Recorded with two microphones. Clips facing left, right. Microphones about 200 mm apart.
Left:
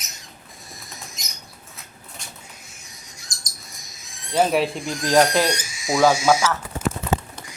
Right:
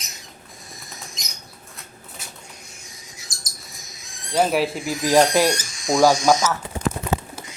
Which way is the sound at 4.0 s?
Centre (ahead or behind).